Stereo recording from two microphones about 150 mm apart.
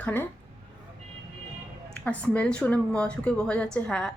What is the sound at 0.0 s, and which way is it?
Speech, 10° left (ahead or behind).